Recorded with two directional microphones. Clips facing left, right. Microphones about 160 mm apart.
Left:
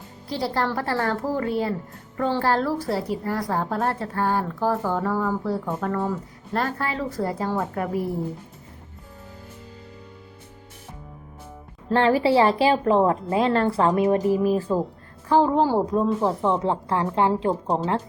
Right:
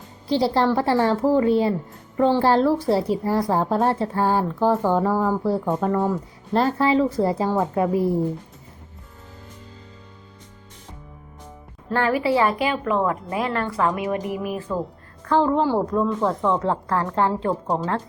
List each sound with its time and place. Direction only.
0.3 s a woman's voice: 25° right (ahead or behind)
5.5 s a woman's voice: 15° right (ahead or behind)
6.5 s a woman's voice: 25° right (ahead or behind)
11.9 s a woman's voice: 30° left (ahead or behind)
15.6 s a woman's voice: 15° left (ahead or behind)
16.0 s a woman's voice: 30° left (ahead or behind)
17.0 s a woman's voice: 10° left (ahead or behind)